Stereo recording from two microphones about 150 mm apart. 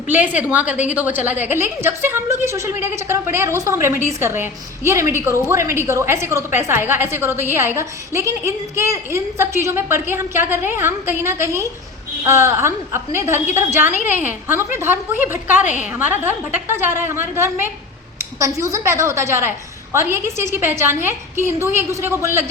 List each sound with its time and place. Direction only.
0.1 s a woman's voice: 10° right (ahead or behind)
15.5 s a woman's voice: 55° left (ahead or behind)
16.2 s a woman's voice: 15° right (ahead or behind)